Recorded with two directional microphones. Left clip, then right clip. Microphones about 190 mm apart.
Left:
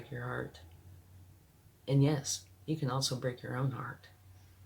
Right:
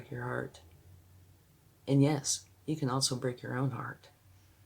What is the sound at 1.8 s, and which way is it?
Speech, 50° right (ahead or behind).